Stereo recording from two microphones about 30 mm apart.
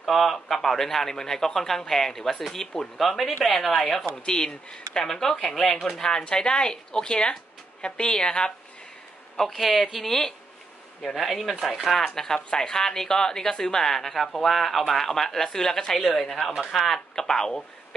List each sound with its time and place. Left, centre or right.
0.0 s a woman's voice: centre
4.3 s speech: left
5.0 s a woman's voice: centre
5.9 s speech: left
9.5 s speech: centre
10.0 s a woman's voice: centre
12.2 s a woman's voice: centre